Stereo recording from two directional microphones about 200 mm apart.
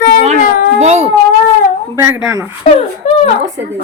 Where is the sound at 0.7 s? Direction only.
35° right (ahead or behind).